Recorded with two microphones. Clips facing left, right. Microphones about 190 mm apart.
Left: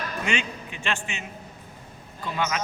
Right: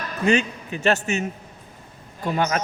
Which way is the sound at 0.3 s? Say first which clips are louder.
Right 12 dB; 40° right (ahead or behind).